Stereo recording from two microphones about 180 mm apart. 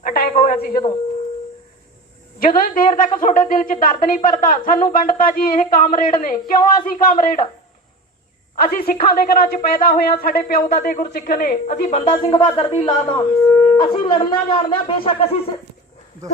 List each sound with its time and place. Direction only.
0.0 s a sound: 55° left (ahead or behind)
2.6 s speech: 50° left (ahead or behind)
8.5 s speech: 55° left (ahead or behind)
12.0 s shofar: 25° left (ahead or behind)